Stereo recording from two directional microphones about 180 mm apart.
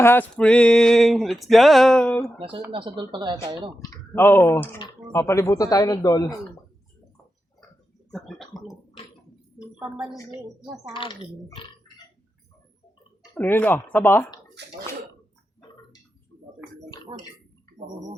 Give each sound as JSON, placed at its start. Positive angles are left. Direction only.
{"t": 0.0, "sound": "a sound", "side_deg": 10}
{"t": 2.7, "sound": "speech", "side_deg": -25}
{"t": 3.8, "sound": "a man's voice", "side_deg": 15}
{"t": 8.1, "sound": "a sound", "side_deg": 0}
{"t": 10.9, "sound": "a man's voice", "side_deg": 30}
{"t": 13.3, "sound": "speech", "side_deg": 10}
{"t": 14.6, "sound": "speech", "side_deg": -70}
{"t": 17.1, "sound": "speech", "side_deg": -30}